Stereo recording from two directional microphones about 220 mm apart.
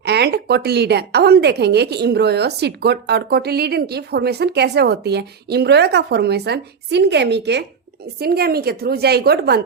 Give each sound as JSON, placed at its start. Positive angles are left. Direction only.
{"t": 0.0, "sound": "a woman's voice", "side_deg": -50}